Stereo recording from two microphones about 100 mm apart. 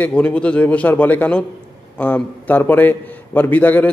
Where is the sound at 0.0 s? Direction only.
10° left (ahead or behind).